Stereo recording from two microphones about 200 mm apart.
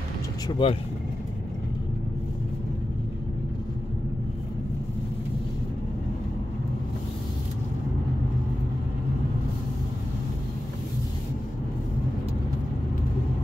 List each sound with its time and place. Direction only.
0.5 s speech: 25° left (ahead or behind)